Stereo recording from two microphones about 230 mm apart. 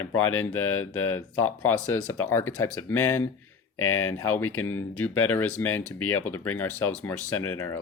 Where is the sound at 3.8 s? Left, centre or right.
Left.